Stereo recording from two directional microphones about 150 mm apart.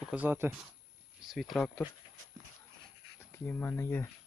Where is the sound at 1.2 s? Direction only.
Centre (ahead or behind).